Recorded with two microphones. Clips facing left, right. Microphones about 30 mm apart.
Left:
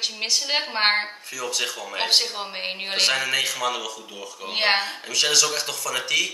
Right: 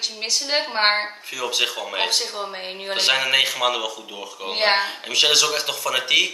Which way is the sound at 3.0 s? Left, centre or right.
Right.